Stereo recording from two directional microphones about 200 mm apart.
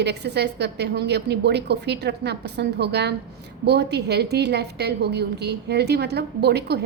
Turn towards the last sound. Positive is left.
turn(degrees=-55)  # may be behind; listen again after turning